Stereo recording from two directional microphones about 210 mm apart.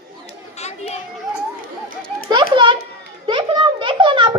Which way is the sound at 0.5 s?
30° left (ahead or behind).